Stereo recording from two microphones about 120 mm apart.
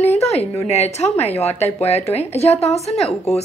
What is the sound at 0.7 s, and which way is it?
A woman's voice, 65° left (ahead or behind).